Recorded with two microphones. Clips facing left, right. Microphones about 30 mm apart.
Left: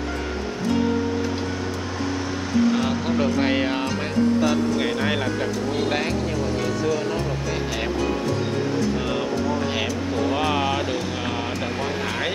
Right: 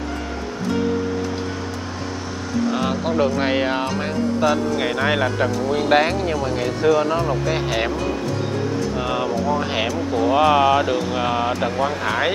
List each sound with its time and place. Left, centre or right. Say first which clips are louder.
2.8 s speech: right 2 dB; centre
5.9 s speech: right 6 dB; right
6.9 s speech: right 6 dB; centre
9.1 s music: right 3 dB; centre
10.1 s speech: right 8 dB; centre